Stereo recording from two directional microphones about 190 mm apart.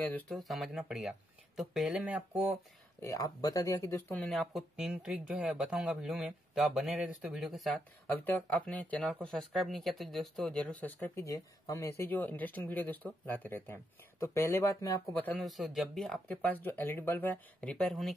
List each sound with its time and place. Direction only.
0.0 s speech: 5° left (ahead or behind)
3.0 s speech: 15° left (ahead or behind)